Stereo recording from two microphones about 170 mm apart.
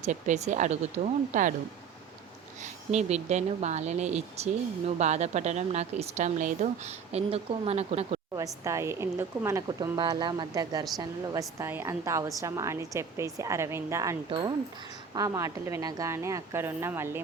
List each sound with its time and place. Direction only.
0.0 s speech: 45° right (ahead or behind)
2.9 s a woman's voice: 40° right (ahead or behind)
8.6 s a woman's voice: 15° right (ahead or behind)
14.3 s a woman's voice: 30° right (ahead or behind)
15.1 s a woman's voice: 20° right (ahead or behind)